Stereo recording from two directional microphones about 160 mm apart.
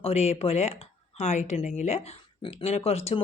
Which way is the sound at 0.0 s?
40° left (ahead or behind).